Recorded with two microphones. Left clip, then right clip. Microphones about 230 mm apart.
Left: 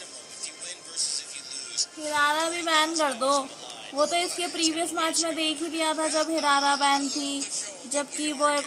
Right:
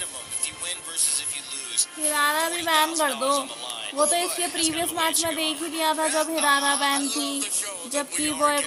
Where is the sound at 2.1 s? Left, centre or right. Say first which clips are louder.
Right 1 dB; centre.